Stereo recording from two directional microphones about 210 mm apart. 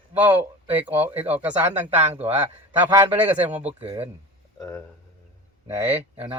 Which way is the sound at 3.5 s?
30° right (ahead or behind).